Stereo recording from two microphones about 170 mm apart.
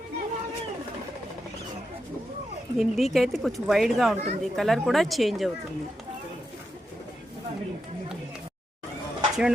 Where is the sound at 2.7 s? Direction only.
Centre (ahead or behind).